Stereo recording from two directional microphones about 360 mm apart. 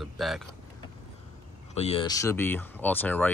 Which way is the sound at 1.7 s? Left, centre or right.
Centre.